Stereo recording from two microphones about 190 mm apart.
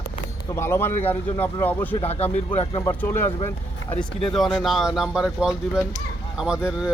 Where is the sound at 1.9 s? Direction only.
30° left (ahead or behind).